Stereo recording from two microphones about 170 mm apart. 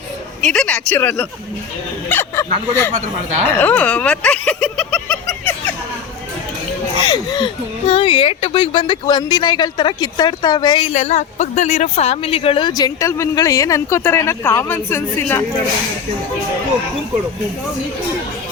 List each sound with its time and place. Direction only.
0.4 s speech: 5° left (ahead or behind)
7.0 s speech: 25° left (ahead or behind)